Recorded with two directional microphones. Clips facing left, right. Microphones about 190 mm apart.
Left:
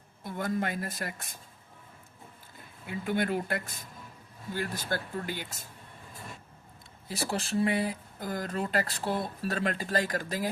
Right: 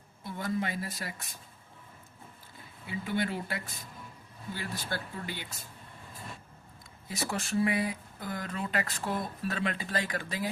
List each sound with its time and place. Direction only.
0.3 s speech: 50° left (ahead or behind)
2.8 s speech: 50° left (ahead or behind)
7.1 s speech: 30° left (ahead or behind)